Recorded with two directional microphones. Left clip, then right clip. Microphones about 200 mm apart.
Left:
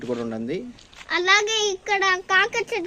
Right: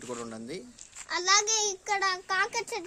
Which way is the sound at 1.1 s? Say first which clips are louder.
Left 7 dB; 25° left (ahead or behind).